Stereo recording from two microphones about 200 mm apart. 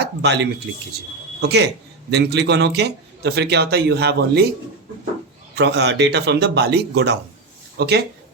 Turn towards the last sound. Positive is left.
turn(degrees=-55)  # may be behind; listen again after turning